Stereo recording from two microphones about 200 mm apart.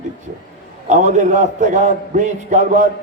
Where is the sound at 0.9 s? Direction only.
35° right (ahead or behind).